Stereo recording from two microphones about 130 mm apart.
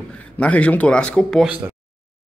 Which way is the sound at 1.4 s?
10° right (ahead or behind).